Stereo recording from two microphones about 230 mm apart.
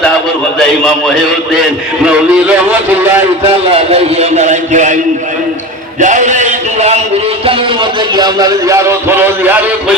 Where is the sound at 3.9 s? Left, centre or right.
Right.